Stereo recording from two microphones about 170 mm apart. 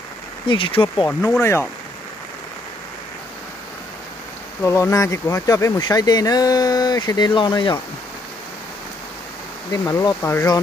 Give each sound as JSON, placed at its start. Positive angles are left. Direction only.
{"t": 0.5, "sound": "speech", "side_deg": 30}
{"t": 1.4, "sound": "speech", "side_deg": 15}
{"t": 4.6, "sound": "speech", "side_deg": 15}
{"t": 9.7, "sound": "speech", "side_deg": 20}